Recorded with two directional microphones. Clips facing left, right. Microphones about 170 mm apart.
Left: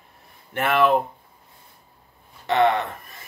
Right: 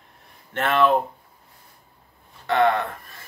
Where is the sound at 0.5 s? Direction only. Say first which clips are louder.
Even; 15° left (ahead or behind).